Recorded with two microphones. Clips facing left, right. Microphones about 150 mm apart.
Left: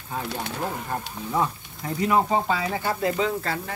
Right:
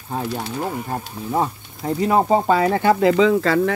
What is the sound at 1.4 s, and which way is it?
Speech, 35° right (ahead or behind).